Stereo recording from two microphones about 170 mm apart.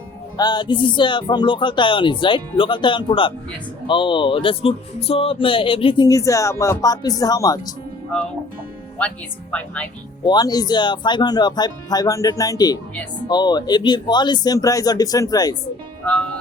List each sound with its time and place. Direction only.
0.3 s speech: 25° left (ahead or behind)
9.0 s speech: 5° left (ahead or behind)
10.2 s speech: 25° left (ahead or behind)
16.0 s speech: 5° left (ahead or behind)